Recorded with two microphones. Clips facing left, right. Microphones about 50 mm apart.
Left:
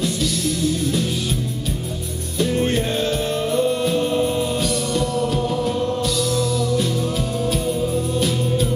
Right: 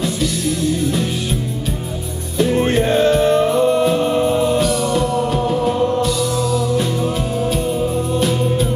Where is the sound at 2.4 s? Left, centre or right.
Centre.